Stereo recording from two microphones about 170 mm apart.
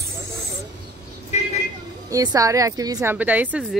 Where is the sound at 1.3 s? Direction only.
40° left (ahead or behind).